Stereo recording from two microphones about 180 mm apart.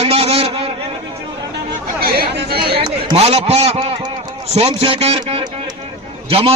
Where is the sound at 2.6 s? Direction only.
30° right (ahead or behind).